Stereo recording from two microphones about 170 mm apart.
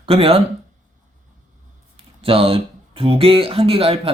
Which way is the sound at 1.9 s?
35° right (ahead or behind).